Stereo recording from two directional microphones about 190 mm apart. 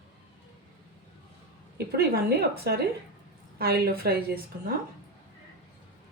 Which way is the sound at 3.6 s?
55° right (ahead or behind).